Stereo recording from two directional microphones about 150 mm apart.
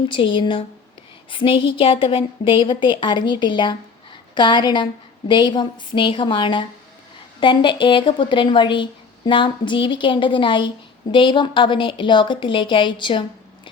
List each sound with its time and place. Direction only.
0.1 s a woman's voice: 35° left (ahead or behind)